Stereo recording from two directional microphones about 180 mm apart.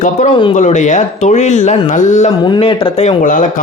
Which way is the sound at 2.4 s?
25° left (ahead or behind).